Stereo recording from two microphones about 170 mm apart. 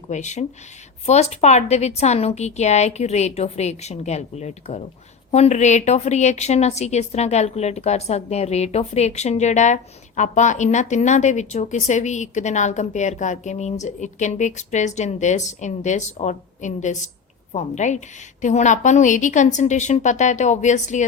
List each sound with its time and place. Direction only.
0.1 s a woman's voice: 45° left (ahead or behind)